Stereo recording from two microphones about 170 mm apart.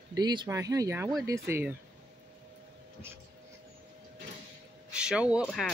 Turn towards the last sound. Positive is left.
turn(degrees=0)  # may be behind; listen again after turning